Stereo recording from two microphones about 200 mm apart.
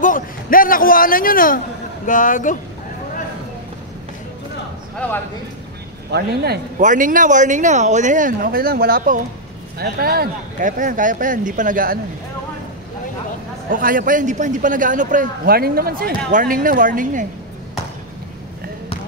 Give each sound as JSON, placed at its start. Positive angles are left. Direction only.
{"t": 0.0, "sound": "a man's voice", "side_deg": 45}
{"t": 4.9, "sound": "a man's voice", "side_deg": 5}
{"t": 6.1, "sound": "speech", "side_deg": -55}
{"t": 6.8, "sound": "a man's voice", "side_deg": -40}
{"t": 13.7, "sound": "a man's voice", "side_deg": -45}